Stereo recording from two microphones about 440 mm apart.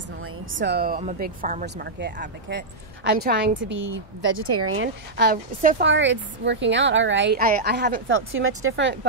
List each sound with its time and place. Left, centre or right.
0.6 s speech: right